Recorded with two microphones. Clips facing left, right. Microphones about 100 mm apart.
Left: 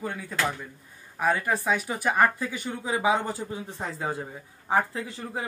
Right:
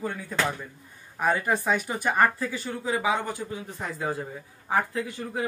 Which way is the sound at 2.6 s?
20° left (ahead or behind).